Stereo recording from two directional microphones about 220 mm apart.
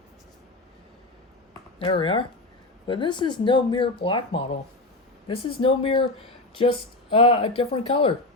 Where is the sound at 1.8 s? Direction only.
20° left (ahead or behind).